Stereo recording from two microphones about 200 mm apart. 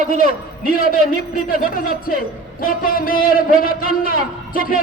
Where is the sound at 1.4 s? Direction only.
45° left (ahead or behind).